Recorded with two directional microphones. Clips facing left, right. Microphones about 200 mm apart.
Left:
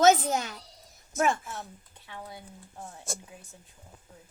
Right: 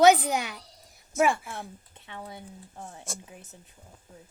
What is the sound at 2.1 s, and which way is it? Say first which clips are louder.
Speech: right 2 dB; 20° right (ahead or behind).